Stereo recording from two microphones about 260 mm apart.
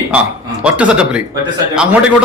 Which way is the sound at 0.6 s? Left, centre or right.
Centre.